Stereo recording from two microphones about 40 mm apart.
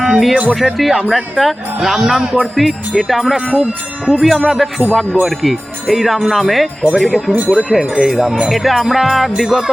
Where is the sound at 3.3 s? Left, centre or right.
Centre.